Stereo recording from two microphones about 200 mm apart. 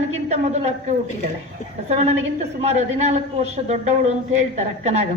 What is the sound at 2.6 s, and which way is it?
A woman's voice, 35° right (ahead or behind).